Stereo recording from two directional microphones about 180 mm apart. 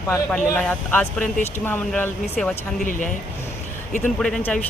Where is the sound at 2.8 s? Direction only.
50° left (ahead or behind).